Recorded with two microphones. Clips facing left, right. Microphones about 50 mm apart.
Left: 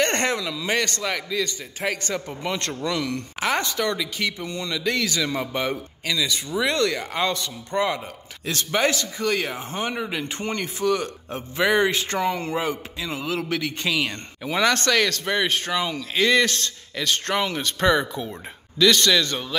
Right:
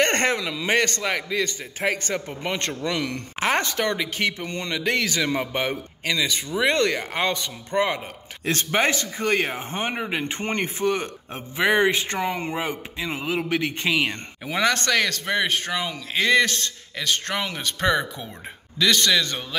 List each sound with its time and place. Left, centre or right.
0.0 s a man's voice: right
8.5 s speech: right
14.4 s speech: centre
17.0 s speech: centre